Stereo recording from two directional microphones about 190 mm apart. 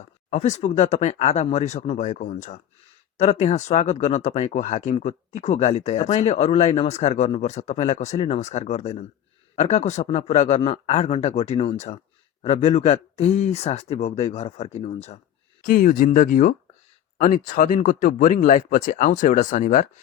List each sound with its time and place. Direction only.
0.3 s speech: 40° left (ahead or behind)
15.6 s speech: 45° left (ahead or behind)